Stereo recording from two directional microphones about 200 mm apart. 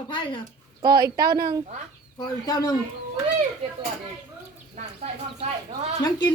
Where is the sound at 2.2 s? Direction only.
20° left (ahead or behind).